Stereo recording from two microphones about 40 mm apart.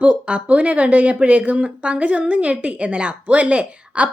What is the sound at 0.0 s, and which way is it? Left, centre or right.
Speech, right.